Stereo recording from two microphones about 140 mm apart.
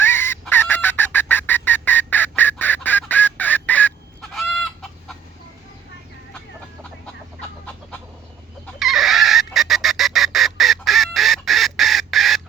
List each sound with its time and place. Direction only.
0.0 s fowl: 15° left (ahead or behind)
0.5 s bird: 15° left (ahead or behind)
8.8 s chicken: centre (ahead or behind)